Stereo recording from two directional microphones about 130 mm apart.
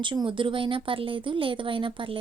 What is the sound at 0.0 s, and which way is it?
Speech, 40° right (ahead or behind).